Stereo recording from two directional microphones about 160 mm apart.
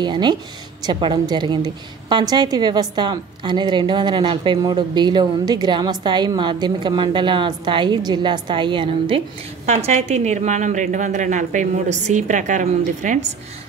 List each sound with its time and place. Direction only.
0.0 s a woman's voice: 25° right (ahead or behind)
9.7 s a woman's voice: 45° right (ahead or behind)